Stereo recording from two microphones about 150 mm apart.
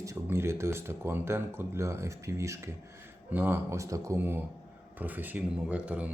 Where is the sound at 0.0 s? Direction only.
20° right (ahead or behind).